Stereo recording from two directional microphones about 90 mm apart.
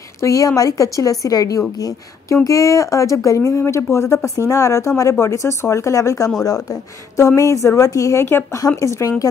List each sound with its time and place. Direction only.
0.2 s a woman's voice: 35° left (ahead or behind)